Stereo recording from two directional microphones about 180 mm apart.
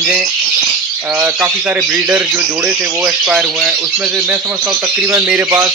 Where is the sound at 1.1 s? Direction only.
15° right (ahead or behind).